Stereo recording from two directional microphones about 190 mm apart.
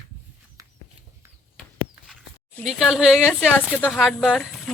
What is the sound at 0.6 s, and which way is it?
Horse, 20° right (ahead or behind).